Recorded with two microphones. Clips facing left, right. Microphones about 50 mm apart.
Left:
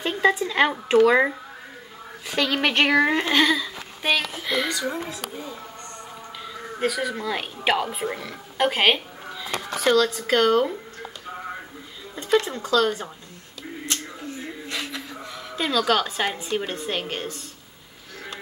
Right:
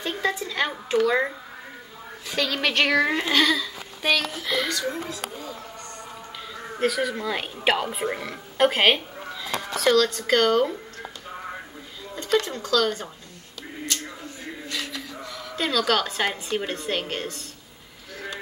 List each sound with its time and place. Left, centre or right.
0.2 s speech: left
6.4 s a woman's voice: centre
12.2 s speech: centre
14.7 s male singing: left
15.5 s a woman's voice: centre